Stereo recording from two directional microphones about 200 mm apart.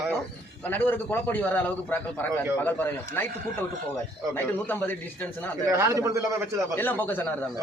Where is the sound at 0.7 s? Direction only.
10° left (ahead or behind).